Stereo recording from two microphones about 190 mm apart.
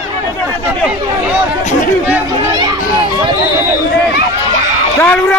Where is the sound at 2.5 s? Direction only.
20° right (ahead or behind).